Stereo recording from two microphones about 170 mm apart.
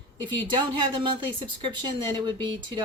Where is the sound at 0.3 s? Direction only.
30° right (ahead or behind).